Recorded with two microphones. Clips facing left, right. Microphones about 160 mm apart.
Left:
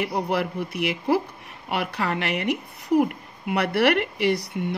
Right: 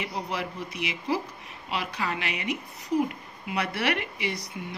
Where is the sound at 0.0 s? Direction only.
65° left (ahead or behind).